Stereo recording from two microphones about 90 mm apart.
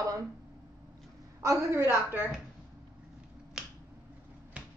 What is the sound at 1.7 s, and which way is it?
Speech, 25° right (ahead or behind).